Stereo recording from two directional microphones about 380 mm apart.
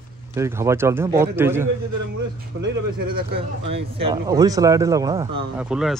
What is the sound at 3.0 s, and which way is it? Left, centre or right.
Speech, right.